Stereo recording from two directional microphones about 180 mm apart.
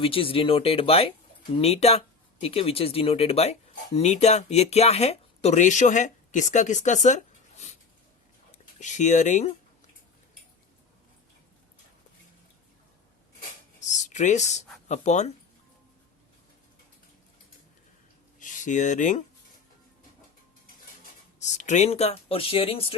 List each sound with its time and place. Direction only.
0.0 s speech: 30° left (ahead or behind)
13.7 s a sound: 40° left (ahead or behind)
14.8 s speech: 40° left (ahead or behind)
18.3 s speech: 45° left (ahead or behind)
21.3 s speech: 40° left (ahead or behind)